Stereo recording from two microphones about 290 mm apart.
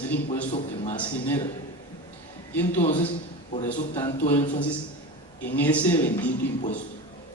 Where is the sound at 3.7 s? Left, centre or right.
Left.